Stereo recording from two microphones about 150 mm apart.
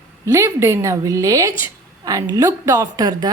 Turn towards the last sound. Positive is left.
turn(degrees=-25)  # may be behind; listen again after turning